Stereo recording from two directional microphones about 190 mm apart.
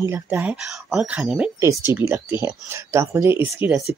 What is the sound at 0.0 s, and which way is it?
Speech, 15° right (ahead or behind).